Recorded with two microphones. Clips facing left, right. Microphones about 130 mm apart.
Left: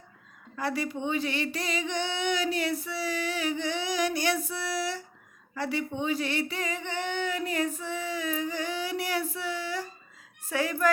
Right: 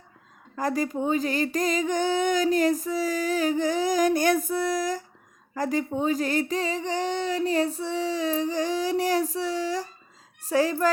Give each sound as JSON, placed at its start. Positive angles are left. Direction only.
{"t": 0.5, "sound": "speech", "side_deg": -40}